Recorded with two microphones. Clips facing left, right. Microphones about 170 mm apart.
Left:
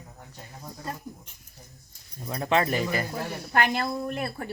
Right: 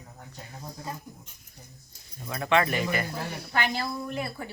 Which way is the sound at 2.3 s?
30° left (ahead or behind).